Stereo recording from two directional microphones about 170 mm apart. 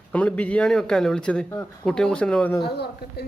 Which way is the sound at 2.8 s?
70° left (ahead or behind).